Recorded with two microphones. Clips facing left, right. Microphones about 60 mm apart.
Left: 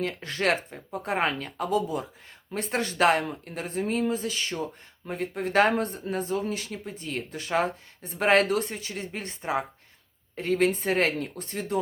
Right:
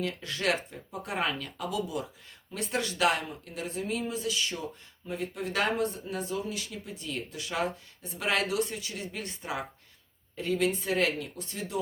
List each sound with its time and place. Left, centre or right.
0.0 s speech: left
10.3 s speech: left